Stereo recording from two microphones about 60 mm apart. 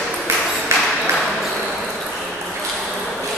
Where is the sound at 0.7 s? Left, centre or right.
Right.